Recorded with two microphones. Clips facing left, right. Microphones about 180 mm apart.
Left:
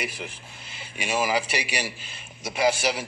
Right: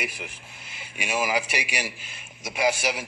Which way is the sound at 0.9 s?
35° left (ahead or behind).